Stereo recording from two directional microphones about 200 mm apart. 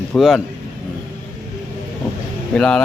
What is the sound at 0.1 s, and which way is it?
Speech, centre (ahead or behind).